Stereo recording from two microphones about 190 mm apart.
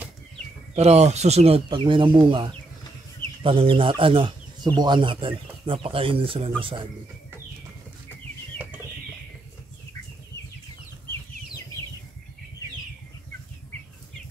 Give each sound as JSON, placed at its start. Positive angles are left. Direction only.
{"t": 0.7, "sound": "speech", "side_deg": -35}